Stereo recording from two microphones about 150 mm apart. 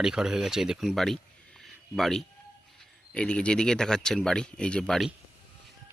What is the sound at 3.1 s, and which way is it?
Speech, 5° left (ahead or behind).